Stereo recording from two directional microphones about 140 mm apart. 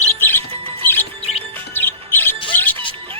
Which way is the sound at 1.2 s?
50° left (ahead or behind).